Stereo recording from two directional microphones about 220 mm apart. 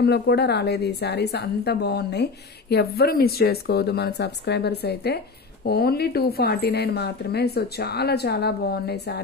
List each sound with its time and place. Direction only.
0.0 s speech: 50° left (ahead or behind)